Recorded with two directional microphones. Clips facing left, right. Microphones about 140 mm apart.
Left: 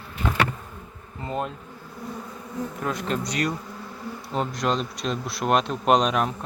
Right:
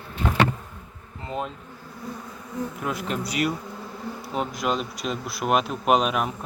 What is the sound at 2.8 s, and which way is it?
Speech, 5° right (ahead or behind).